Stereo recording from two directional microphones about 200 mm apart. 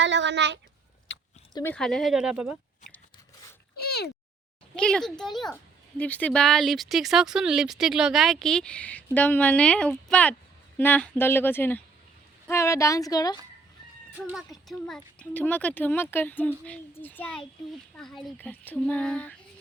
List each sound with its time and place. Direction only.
0.0 s speech: 60° right (ahead or behind)
1.7 s speech: 5° left (ahead or behind)
3.8 s a sound: 50° left (ahead or behind)
4.7 s speech: 5° left (ahead or behind); by 13.4 s 20° left (ahead or behind)
14.3 s speech: centre (ahead or behind)